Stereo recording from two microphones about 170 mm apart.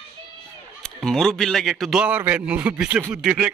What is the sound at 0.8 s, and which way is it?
Speech, 5° left (ahead or behind).